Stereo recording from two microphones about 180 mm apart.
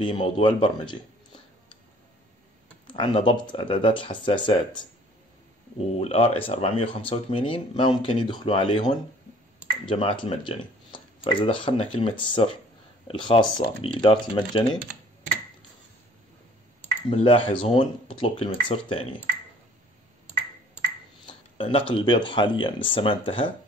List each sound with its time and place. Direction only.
0.0 s speech: 25° left (ahead or behind)
2.9 s speech: 30° left (ahead or behind)
5.9 s speech: 35° left (ahead or behind)
17.1 s speech: 30° left (ahead or behind)
21.3 s speech: 30° left (ahead or behind)